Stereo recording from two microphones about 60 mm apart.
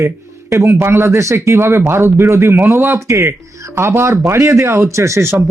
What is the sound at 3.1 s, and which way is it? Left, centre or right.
A man's voice, right.